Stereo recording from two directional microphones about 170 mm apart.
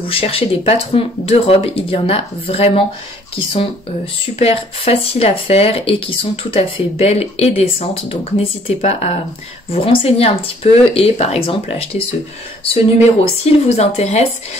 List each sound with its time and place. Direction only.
0.0 s speech: 35° left (ahead or behind)
13.4 s speech: 35° left (ahead or behind)